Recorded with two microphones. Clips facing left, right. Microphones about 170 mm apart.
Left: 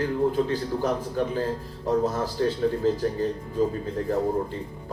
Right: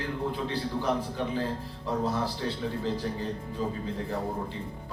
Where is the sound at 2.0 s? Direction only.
45° left (ahead or behind).